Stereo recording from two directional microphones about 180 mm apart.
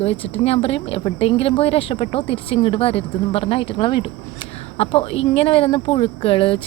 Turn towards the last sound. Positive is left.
turn(degrees=30)  # may be behind; listen again after turning